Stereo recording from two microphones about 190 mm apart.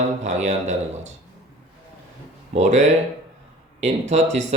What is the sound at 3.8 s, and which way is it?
Speech, 35° right (ahead or behind).